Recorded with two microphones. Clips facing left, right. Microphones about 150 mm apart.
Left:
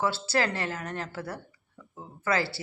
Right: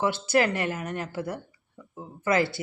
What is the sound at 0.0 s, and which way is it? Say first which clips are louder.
A woman's voice: right 4 dB; 20° right (ahead or behind).